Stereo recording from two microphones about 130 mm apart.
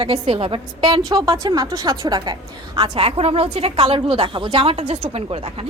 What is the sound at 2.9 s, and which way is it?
A woman's voice, 50° right (ahead or behind).